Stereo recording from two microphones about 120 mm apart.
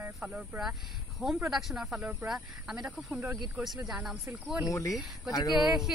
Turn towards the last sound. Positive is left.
turn(degrees=-5)  # may be behind; listen again after turning